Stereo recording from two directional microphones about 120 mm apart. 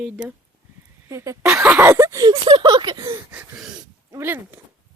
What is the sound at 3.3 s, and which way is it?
Speech, 5° right (ahead or behind).